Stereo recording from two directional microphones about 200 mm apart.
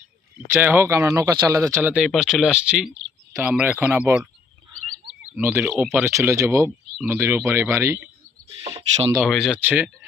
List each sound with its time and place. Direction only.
0.5 s speech: 10° right (ahead or behind)
5.3 s speech: 10° right (ahead or behind)
8.6 s speech: 30° right (ahead or behind)
9.1 s speech: 5° right (ahead or behind)